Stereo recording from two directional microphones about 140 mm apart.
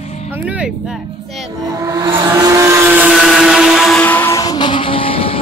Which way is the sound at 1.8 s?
25° right (ahead or behind).